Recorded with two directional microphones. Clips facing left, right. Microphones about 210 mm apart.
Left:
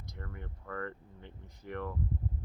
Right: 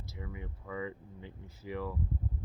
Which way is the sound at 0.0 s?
5° right (ahead or behind).